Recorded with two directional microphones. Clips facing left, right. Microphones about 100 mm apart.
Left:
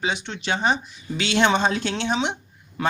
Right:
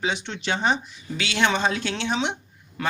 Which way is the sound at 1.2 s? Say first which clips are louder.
Left 3 dB; 30° left (ahead or behind).